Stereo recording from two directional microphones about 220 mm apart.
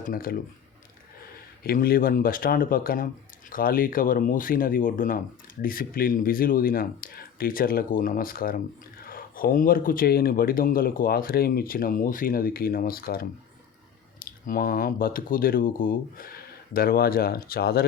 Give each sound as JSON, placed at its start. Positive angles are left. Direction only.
{"t": 0.0, "sound": "speech", "side_deg": 40}
{"t": 1.6, "sound": "speech", "side_deg": 40}